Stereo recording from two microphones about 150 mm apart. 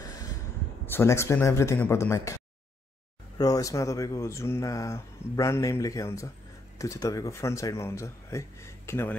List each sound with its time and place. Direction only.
0.8 s speech: 15° left (ahead or behind)